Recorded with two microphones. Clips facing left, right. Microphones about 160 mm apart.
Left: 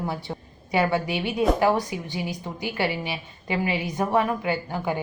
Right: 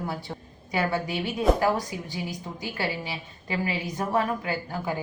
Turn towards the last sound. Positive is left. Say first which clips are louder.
# left 4 dB
turn(degrees=25)  # may be behind; listen again after turning